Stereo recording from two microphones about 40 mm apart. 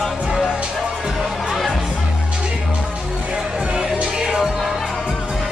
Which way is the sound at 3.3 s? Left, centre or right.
Right.